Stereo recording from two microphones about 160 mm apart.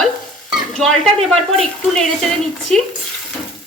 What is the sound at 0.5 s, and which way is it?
Stir, centre (ahead or behind).